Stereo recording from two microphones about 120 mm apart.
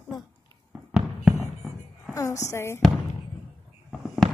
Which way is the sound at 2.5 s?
20° left (ahead or behind).